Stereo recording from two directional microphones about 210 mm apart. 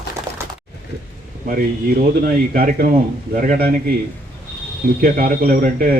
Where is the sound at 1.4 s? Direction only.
45° right (ahead or behind).